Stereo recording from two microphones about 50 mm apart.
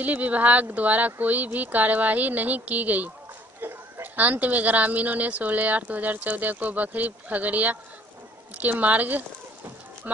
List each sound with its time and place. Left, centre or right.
0.0 s a woman's voice: right